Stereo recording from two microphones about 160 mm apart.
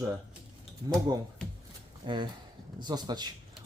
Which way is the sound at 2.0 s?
30° right (ahead or behind).